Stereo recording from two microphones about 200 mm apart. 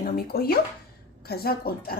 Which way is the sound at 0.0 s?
50° left (ahead or behind).